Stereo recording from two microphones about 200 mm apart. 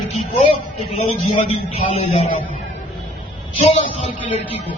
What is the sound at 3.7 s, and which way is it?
Speech, 30° left (ahead or behind).